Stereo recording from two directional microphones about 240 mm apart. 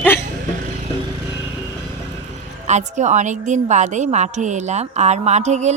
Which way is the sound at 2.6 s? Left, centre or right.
Right.